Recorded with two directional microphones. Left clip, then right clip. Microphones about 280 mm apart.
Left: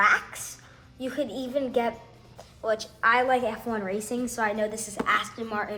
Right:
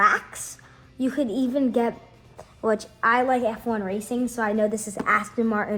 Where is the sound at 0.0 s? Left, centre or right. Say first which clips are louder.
Right 2 dB; right.